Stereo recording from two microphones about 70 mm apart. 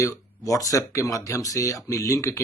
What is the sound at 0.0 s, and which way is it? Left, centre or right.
Speech, left.